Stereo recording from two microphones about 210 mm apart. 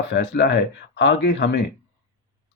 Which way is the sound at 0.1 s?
55° left (ahead or behind).